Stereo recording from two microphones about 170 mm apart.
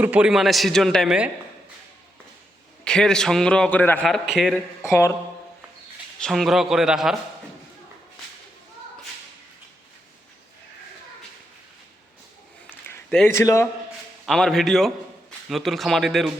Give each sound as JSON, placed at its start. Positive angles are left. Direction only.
{"t": 0.0, "sound": "a man's voice", "side_deg": -5}
{"t": 2.8, "sound": "a man's voice", "side_deg": 5}
{"t": 6.1, "sound": "a man's voice", "side_deg": 0}
{"t": 12.7, "sound": "a sound", "side_deg": 10}
{"t": 13.3, "sound": "a man's voice", "side_deg": 15}
{"t": 14.3, "sound": "a man's voice", "side_deg": 0}